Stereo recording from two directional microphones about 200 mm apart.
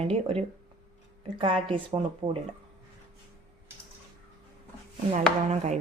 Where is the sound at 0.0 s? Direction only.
30° right (ahead or behind).